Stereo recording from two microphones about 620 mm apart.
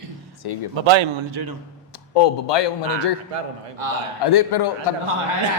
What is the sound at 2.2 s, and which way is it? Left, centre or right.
Speech, left.